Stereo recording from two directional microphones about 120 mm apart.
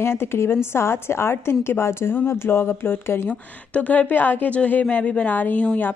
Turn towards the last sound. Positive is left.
turn(degrees=15)  # may be behind; listen again after turning